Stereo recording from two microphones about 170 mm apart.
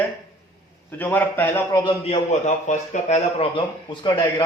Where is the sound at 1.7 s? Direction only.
30° left (ahead or behind).